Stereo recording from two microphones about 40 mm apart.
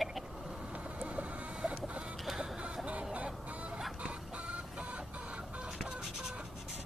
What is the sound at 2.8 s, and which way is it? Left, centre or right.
Chicken, right.